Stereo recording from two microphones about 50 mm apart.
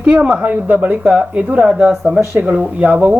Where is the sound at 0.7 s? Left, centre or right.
Right.